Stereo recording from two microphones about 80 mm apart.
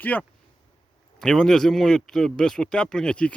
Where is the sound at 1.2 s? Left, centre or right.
Centre.